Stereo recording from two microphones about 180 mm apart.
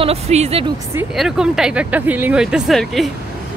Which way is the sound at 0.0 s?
35° right (ahead or behind).